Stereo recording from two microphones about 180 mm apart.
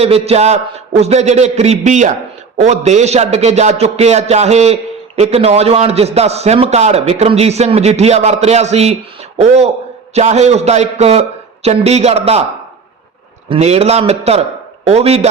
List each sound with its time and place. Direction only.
0.0 s a man's voice: 35° right (ahead or behind)
13.5 s a man's voice: 35° right (ahead or behind)